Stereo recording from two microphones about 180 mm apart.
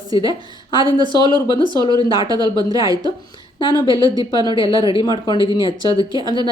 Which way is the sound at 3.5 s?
30° left (ahead or behind).